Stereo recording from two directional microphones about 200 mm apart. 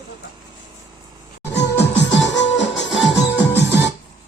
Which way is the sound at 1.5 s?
60° left (ahead or behind).